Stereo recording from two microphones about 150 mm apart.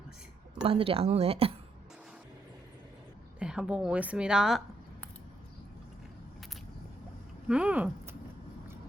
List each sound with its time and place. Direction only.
0.6 s a woman's voice: 40° right (ahead or behind)
3.4 s a woman's voice: 5° right (ahead or behind)
7.4 s speech: 5° right (ahead or behind)